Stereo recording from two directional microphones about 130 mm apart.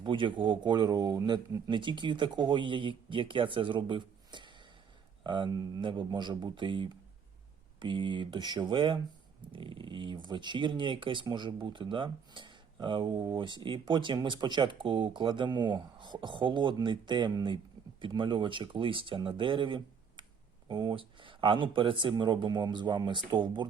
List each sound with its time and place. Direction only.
0.0 s speech: 40° right (ahead or behind)
1.7 s speech: 40° right (ahead or behind)